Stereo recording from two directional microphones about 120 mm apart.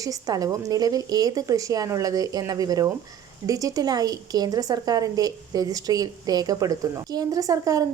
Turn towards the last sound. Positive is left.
turn(degrees=-30)  # may be behind; listen again after turning